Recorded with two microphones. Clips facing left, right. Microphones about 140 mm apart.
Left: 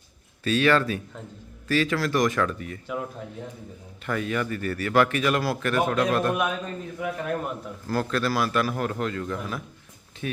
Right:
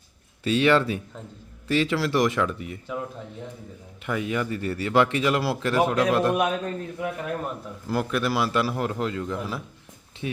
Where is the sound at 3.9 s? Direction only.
15° right (ahead or behind).